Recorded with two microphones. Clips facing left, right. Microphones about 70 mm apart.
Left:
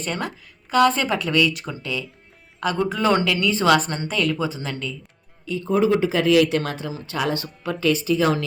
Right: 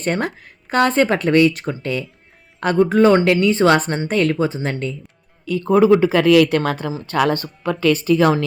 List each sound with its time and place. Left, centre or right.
0.0 s speech: right
2.7 s a woman's voice: right
5.5 s speech: right